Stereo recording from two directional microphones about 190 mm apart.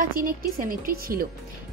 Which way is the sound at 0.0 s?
45° right (ahead or behind).